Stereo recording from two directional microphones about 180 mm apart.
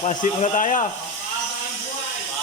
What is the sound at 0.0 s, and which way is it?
Speech, 40° left (ahead or behind).